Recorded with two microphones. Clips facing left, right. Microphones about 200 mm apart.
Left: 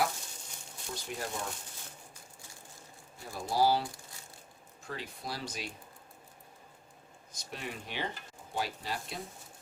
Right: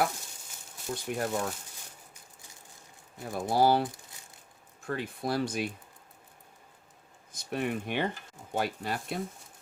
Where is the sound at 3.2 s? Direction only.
55° right (ahead or behind).